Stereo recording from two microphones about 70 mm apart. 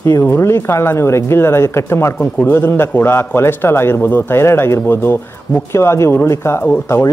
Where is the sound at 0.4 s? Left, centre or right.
Left.